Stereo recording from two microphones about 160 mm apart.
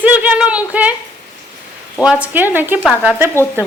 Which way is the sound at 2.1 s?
10° right (ahead or behind).